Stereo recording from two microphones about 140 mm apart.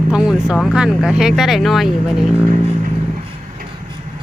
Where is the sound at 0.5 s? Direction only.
Centre (ahead or behind).